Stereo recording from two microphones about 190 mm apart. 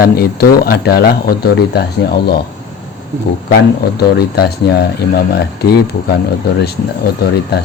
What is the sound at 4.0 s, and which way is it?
Speech, 55° left (ahead or behind).